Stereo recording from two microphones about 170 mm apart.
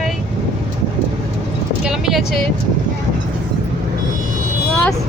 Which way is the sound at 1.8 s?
Centre (ahead or behind).